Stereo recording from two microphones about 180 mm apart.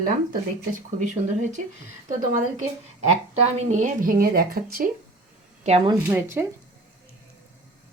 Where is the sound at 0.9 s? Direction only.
40° right (ahead or behind).